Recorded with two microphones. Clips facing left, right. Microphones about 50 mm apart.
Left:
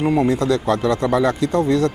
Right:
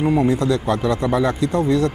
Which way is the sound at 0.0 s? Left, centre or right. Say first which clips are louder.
Even; centre.